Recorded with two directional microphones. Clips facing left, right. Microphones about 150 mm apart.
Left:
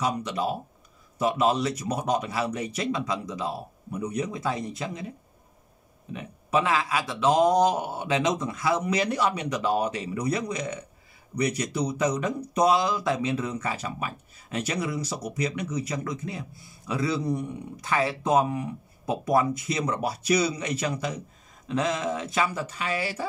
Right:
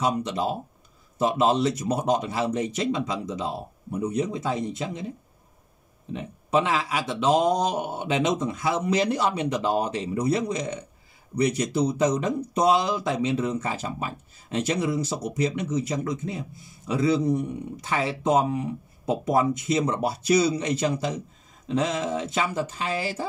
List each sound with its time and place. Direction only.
0.0 s speech: 30° right (ahead or behind)
6.1 s speech: 25° right (ahead or behind)